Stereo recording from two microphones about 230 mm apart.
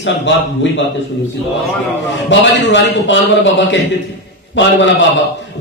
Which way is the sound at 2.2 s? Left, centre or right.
Left.